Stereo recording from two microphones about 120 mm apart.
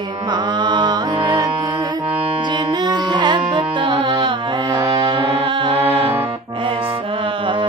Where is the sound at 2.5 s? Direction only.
35° right (ahead or behind).